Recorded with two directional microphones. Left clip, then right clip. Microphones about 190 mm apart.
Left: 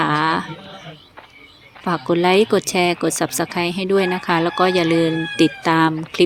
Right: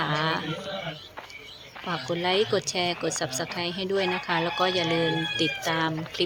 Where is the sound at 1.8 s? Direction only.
30° left (ahead or behind).